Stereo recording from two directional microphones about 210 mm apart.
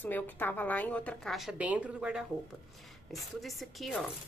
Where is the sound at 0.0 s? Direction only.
10° left (ahead or behind).